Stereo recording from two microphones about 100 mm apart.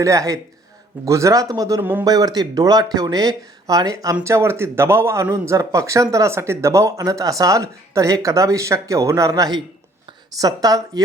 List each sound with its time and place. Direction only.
0.0 s speech: 35° right (ahead or behind)
1.8 s a man's voice: 20° right (ahead or behind)
2.0 s speech: 40° right (ahead or behind)